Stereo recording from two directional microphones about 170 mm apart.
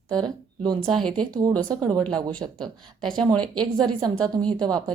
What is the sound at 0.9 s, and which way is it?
Speech, 5° left (ahead or behind).